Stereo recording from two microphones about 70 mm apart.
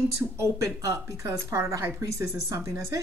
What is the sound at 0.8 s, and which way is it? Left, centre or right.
A woman's voice, right.